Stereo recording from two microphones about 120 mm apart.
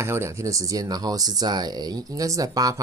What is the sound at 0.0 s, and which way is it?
Speech, 20° right (ahead or behind).